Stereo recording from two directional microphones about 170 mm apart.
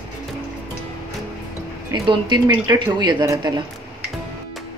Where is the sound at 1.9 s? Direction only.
25° right (ahead or behind).